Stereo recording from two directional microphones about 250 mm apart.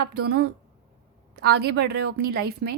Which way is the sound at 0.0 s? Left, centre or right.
Right.